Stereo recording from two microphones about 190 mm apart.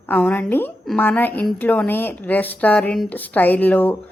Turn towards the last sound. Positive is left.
turn(degrees=10)  # may be behind; listen again after turning